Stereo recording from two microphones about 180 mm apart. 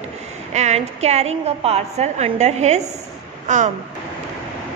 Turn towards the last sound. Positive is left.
turn(degrees=-40)  # may be behind; listen again after turning